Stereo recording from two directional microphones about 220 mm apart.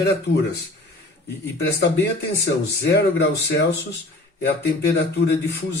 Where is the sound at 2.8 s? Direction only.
50° left (ahead or behind).